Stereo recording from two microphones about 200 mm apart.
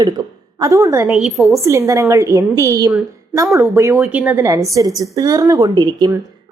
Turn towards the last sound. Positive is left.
turn(degrees=-20)  # may be behind; listen again after turning